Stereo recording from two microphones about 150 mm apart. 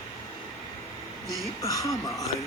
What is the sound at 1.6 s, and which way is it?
Speech, 25° left (ahead or behind).